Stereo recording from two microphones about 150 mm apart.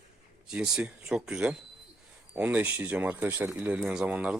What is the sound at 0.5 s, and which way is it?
Speech, 5° right (ahead or behind).